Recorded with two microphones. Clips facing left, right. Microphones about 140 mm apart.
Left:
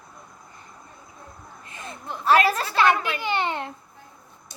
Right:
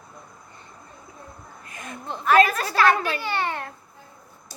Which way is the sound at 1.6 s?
30° left (ahead or behind).